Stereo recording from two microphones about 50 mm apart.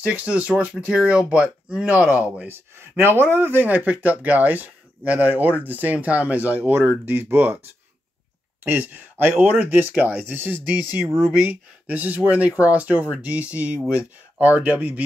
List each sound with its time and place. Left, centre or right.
0.2 s speech: right
2.4 s speech: right
8.6 s speech: right